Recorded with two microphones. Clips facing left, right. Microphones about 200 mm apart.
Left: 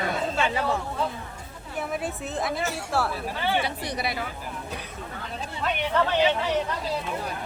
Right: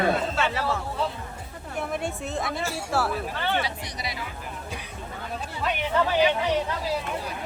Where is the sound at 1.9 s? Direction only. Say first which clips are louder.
Even; centre (ahead or behind).